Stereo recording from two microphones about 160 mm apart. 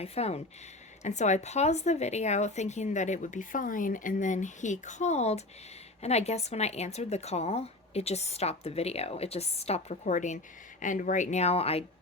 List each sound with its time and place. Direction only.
0.0 s speech: 40° left (ahead or behind)